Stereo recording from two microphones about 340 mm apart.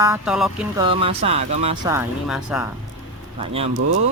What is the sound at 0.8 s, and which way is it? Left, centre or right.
Speech, centre.